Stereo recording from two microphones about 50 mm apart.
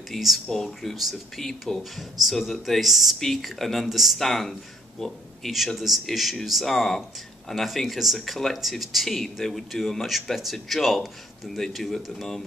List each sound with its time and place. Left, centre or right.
0.1 s speech: centre